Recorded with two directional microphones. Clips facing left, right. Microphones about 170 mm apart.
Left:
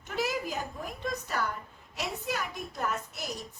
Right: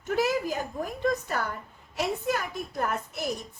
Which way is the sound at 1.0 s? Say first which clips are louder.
Right 5 dB; 50° right (ahead or behind).